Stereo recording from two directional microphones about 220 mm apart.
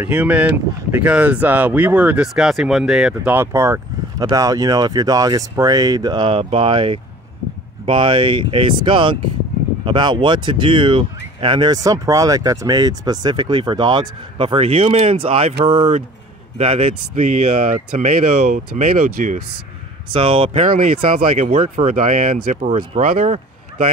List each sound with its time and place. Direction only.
0.0 s speech: 5° right (ahead or behind); by 19.4 s 35° right (ahead or behind)
20.1 s speech: 25° right (ahead or behind)
20.7 s speech: 40° right (ahead or behind)